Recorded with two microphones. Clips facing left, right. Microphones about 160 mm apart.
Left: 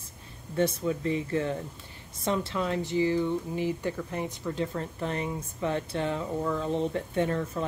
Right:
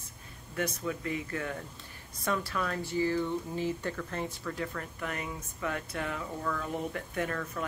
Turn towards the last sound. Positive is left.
turn(degrees=25)  # may be behind; listen again after turning